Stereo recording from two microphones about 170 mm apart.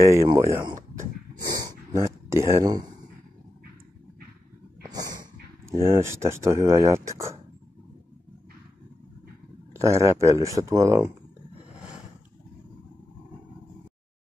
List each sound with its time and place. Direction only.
0.0 s speech: 15° right (ahead or behind)
0.9 s a sound: 20° right (ahead or behind)
4.8 s dog: 20° right (ahead or behind)
5.9 s speech: 15° right (ahead or behind)
9.8 s speech: 15° right (ahead or behind)